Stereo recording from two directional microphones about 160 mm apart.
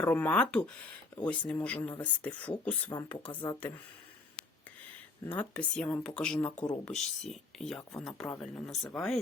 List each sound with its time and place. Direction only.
0.1 s speech: 10° left (ahead or behind)
3.2 s speech: 30° left (ahead or behind)
5.2 s speech: 10° left (ahead or behind)